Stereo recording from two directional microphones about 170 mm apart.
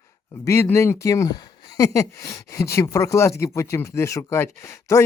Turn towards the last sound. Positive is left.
turn(degrees=15)  # may be behind; listen again after turning